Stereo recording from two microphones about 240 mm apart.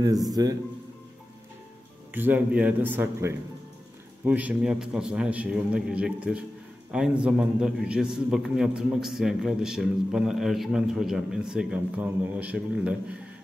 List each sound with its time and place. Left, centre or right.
0.3 s a man's voice: centre
2.1 s a man's voice: centre